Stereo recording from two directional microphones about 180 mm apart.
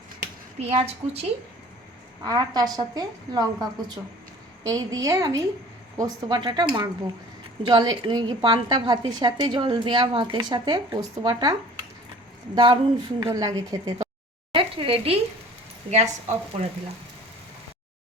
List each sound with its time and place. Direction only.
0.6 s a woman's voice: 35° right (ahead or behind)
2.2 s a woman's voice: 25° right (ahead or behind)
4.6 s a woman's voice: 20° right (ahead or behind)
12.5 s a woman's voice: 30° right (ahead or behind)
14.5 s sizzle: 30° right (ahead or behind)
15.9 s a woman's voice: 40° right (ahead or behind)